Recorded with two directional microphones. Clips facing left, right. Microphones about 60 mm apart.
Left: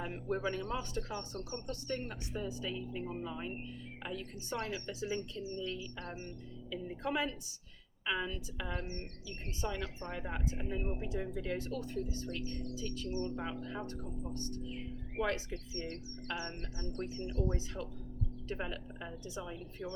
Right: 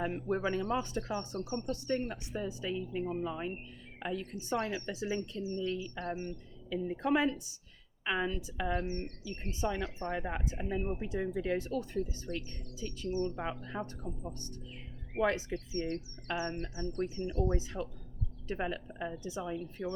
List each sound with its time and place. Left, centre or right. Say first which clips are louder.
0.0 s speech: right 4 dB; right
15.2 s speech: right 5 dB; right